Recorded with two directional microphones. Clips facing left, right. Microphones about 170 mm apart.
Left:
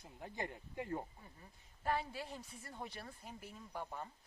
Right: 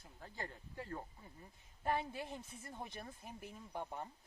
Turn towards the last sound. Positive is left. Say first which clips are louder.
# right 1 dB
turn(degrees=-15)  # may be behind; listen again after turning